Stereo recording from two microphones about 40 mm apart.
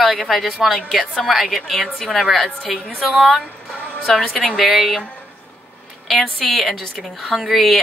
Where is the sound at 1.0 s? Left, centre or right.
Centre.